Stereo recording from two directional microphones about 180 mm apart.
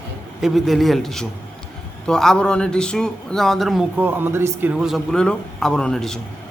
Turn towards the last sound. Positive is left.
turn(degrees=5)  # may be behind; listen again after turning